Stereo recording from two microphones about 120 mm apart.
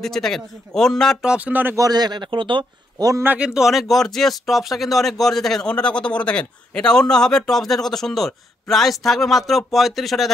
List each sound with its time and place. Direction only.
0.0 s speech: 5° left (ahead or behind)
1.2 s speech: 10° right (ahead or behind)
1.8 s a man's voice: 35° right (ahead or behind)
3.1 s a man's voice: 20° right (ahead or behind)
3.3 s speech: 5° right (ahead or behind)